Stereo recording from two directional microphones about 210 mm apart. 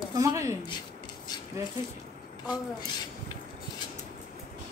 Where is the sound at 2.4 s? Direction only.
20° left (ahead or behind).